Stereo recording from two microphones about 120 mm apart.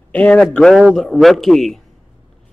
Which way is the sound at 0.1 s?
10° left (ahead or behind).